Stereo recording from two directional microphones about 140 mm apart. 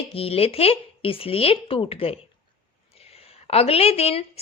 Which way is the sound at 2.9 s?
45° left (ahead or behind).